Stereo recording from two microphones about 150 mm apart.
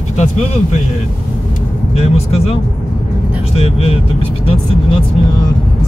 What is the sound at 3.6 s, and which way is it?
Speech, 40° left (ahead or behind).